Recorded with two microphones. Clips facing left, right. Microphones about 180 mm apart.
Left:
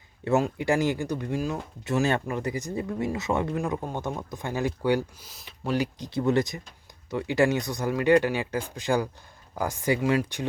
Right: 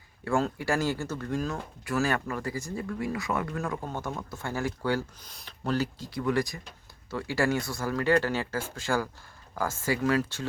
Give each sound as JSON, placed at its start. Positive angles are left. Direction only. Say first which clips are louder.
{"t": 0.3, "sound": "speech", "louder": "left 3 dB", "side_deg": 15}
{"t": 5.3, "sound": "speech", "louder": "left 1 dB", "side_deg": 5}